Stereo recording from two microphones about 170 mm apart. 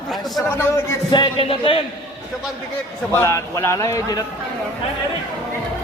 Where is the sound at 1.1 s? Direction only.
30° left (ahead or behind).